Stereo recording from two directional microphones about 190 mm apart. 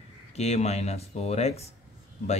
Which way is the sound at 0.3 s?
35° left (ahead or behind).